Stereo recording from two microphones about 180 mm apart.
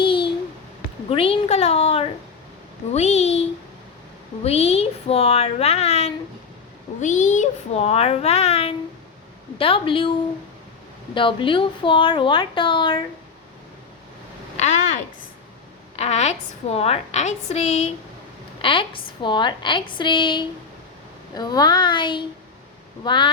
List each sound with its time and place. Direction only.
0.0 s a sound: 30° left (ahead or behind)
1.1 s a woman's voice: 30° left (ahead or behind)
4.4 s a woman's voice: 35° left (ahead or behind)
11.1 s a woman's voice: 30° left (ahead or behind)
14.5 s a sound: 40° left (ahead or behind)
16.0 s a woman's voice: 40° left (ahead or behind)